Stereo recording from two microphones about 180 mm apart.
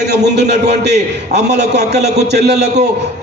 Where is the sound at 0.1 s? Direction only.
65° right (ahead or behind).